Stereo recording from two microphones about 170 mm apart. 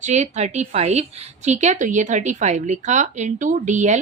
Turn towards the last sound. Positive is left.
turn(degrees=-45)  # may be behind; listen again after turning